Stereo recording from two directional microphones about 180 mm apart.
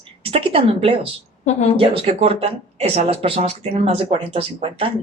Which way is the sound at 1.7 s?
30° right (ahead or behind).